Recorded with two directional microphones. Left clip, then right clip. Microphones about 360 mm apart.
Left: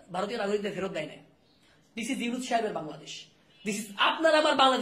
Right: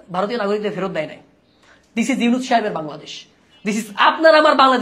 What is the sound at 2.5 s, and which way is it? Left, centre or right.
Speech, right.